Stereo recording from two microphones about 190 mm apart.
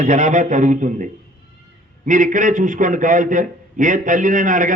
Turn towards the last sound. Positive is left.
turn(degrees=-45)  # may be behind; listen again after turning